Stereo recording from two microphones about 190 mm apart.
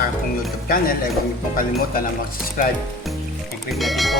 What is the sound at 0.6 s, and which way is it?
Speech, 50° left (ahead or behind).